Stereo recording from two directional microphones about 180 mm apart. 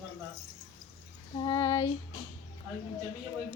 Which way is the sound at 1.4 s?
25° left (ahead or behind).